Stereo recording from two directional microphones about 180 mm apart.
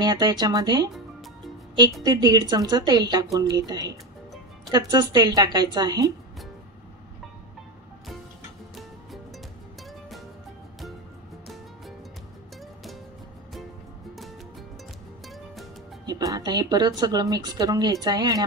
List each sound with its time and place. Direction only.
0.0 s speech: 20° right (ahead or behind)
2.0 s speech: 20° right (ahead or behind)
15.2 s music: centre (ahead or behind)
16.1 s speech: 20° right (ahead or behind)